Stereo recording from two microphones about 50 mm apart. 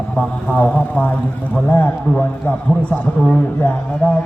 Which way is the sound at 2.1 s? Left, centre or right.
Left.